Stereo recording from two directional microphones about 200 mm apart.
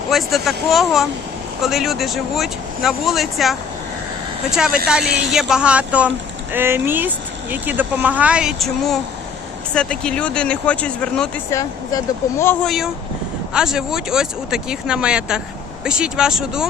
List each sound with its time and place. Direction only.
0.1 s speech: centre (ahead or behind)
5.1 s speech: centre (ahead or behind)
11.5 s speech: 15° left (ahead or behind)
12.6 s speech: centre (ahead or behind)